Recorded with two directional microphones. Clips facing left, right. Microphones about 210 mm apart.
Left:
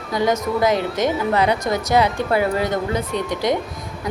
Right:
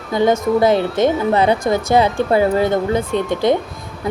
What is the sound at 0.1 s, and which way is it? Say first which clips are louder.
Speech: right 5 dB; 25° right (ahead or behind).